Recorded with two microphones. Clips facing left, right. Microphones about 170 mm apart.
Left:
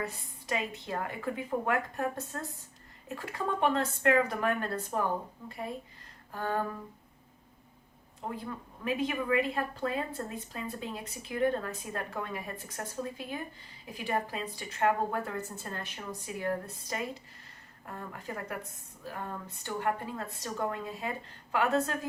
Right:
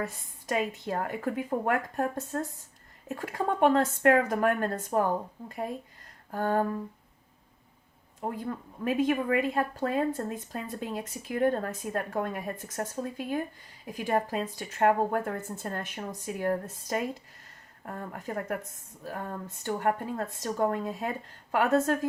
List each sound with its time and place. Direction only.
0.4 s speech: 45° right (ahead or behind)
8.2 s speech: 45° right (ahead or behind)